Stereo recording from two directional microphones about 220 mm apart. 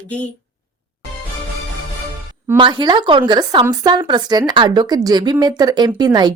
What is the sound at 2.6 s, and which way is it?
Speech, 20° right (ahead or behind).